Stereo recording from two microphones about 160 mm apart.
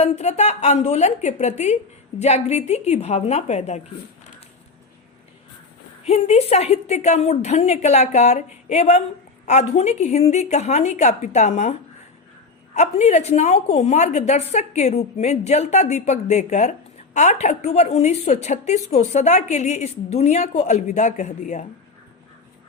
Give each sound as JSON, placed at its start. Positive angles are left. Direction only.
{"t": 0.0, "sound": "a woman's voice", "side_deg": 45}
{"t": 6.1, "sound": "a woman's voice", "side_deg": 40}